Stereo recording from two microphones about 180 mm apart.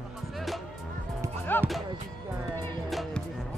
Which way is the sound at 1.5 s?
10° left (ahead or behind).